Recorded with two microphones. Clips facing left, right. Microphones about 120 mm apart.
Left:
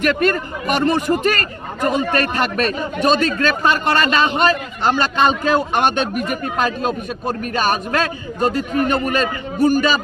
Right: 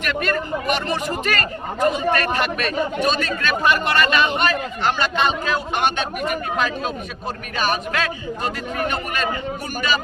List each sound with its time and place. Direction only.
0.0 s speech: 40° left (ahead or behind)